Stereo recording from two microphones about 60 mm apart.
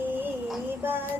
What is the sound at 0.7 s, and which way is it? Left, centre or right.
Child singing, right.